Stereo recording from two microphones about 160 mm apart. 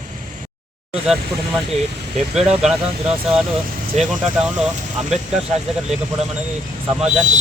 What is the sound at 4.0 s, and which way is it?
Speech, centre (ahead or behind).